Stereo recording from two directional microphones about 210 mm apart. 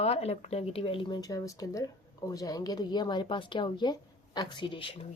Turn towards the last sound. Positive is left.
turn(degrees=25)  # may be behind; listen again after turning